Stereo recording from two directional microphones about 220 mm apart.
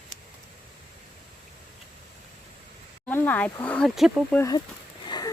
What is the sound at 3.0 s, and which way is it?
Speech, 10° left (ahead or behind).